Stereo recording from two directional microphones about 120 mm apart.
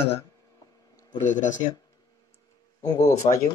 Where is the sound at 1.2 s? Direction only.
90° left.